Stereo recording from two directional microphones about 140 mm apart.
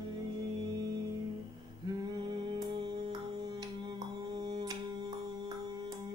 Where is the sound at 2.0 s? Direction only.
30° right (ahead or behind).